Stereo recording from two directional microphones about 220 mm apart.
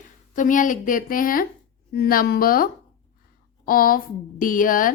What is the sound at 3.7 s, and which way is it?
Speech, 40° left (ahead or behind).